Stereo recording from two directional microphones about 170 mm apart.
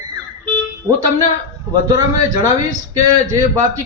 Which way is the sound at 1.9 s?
20° right (ahead or behind).